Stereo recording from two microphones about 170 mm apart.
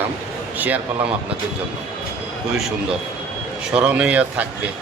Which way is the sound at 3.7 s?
5° right (ahead or behind).